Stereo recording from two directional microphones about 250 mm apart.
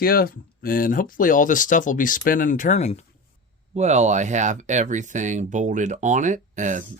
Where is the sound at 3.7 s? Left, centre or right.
Right.